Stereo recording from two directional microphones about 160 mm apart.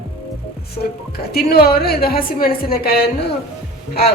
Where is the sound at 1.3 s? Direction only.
75° left (ahead or behind).